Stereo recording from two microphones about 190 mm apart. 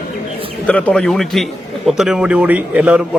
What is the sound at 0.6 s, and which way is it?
A man's voice, 5° left (ahead or behind).